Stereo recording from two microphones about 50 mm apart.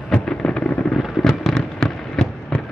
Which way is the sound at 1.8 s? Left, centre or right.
Left.